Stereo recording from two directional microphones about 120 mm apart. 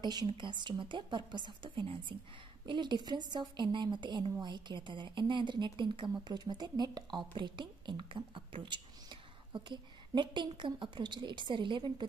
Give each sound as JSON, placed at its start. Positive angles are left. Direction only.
{"t": 0.0, "sound": "a woman's voice", "side_deg": -35}